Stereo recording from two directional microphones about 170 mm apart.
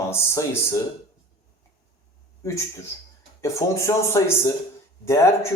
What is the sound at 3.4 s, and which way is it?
Speech, 15° left (ahead or behind).